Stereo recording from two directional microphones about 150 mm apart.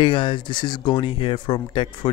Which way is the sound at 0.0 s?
35° left (ahead or behind).